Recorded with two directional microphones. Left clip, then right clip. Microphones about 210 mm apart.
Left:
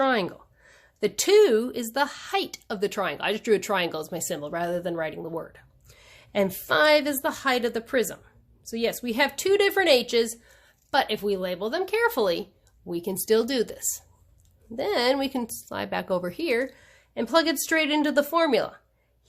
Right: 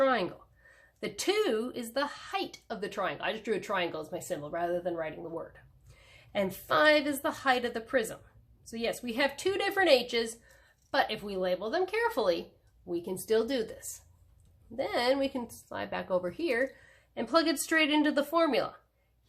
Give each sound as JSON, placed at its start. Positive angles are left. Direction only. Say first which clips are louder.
{"t": 0.0, "sound": "a woman's voice", "louder": "left 4 dB", "side_deg": 40}